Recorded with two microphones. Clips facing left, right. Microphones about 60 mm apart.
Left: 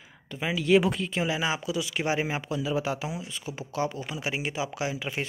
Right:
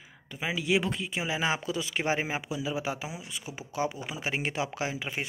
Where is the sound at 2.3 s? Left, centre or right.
Centre.